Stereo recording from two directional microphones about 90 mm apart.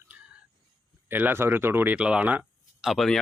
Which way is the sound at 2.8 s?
5° right (ahead or behind).